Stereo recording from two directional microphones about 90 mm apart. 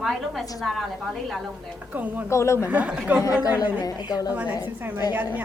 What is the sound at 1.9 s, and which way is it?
Speech, 20° right (ahead or behind).